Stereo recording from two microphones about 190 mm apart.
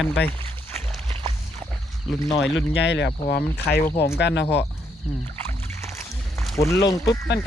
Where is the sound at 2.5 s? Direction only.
75° left (ahead or behind).